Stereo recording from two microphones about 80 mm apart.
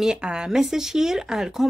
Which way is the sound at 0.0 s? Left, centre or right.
Centre.